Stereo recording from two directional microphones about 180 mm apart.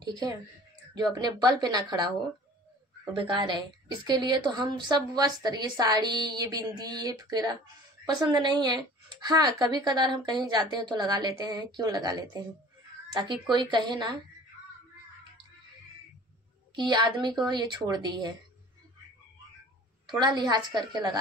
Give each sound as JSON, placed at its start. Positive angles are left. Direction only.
{"t": 0.9, "sound": "a woman's voice", "side_deg": -25}
{"t": 3.3, "sound": "a woman's voice", "side_deg": -25}
{"t": 16.7, "sound": "a woman's voice", "side_deg": -25}
{"t": 20.2, "sound": "a woman's voice", "side_deg": -25}